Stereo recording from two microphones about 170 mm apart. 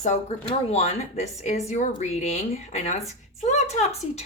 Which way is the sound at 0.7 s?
40° left (ahead or behind).